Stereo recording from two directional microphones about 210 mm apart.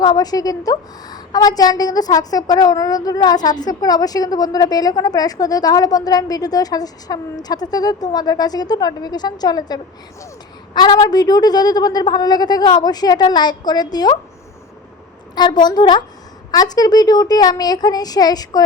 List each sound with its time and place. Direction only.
0.0 s a woman's voice: 20° left (ahead or behind)
15.4 s a woman's voice: 20° left (ahead or behind)